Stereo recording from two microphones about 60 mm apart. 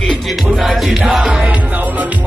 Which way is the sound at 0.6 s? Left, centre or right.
Centre.